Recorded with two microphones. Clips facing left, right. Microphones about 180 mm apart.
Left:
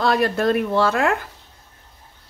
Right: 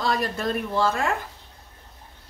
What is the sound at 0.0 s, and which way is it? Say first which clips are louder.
Speech: left 7 dB; 70° left (ahead or behind).